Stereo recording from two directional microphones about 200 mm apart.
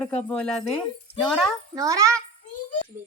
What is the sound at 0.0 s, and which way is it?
Speech, 5° left (ahead or behind).